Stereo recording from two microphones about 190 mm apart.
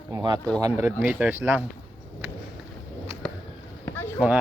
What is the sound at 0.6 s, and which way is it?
Speech, 10° right (ahead or behind).